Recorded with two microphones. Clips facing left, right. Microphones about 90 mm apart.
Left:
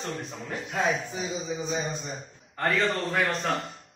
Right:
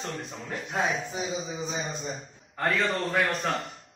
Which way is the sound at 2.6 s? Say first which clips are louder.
Left 1 dB; centre (ahead or behind).